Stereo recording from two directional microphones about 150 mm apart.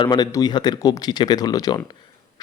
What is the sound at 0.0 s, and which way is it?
A man's voice, 30° left (ahead or behind).